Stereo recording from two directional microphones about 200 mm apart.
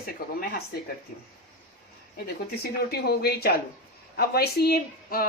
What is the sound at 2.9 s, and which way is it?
Speech, 55° left (ahead or behind).